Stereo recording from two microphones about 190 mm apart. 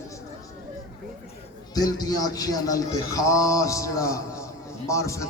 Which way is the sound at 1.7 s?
20° left (ahead or behind).